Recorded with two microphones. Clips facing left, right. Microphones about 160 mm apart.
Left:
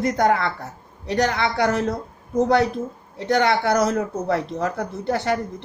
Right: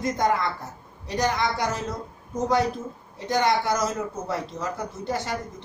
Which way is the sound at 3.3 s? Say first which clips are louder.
Left 4 dB; 65° left (ahead or behind).